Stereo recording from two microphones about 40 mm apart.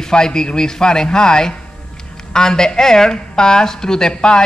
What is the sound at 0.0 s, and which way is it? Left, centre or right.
Speech, centre.